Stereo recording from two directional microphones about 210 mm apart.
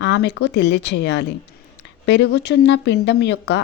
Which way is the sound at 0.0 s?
55° left (ahead or behind).